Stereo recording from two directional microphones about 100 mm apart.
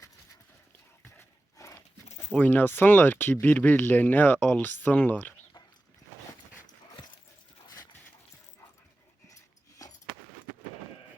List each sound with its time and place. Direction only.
1.0 s dog: 30° left (ahead or behind)
2.4 s speech: 20° left (ahead or behind)
9.3 s dog: 35° left (ahead or behind)